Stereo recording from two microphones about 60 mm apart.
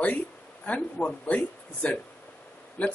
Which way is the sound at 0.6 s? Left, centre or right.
Left.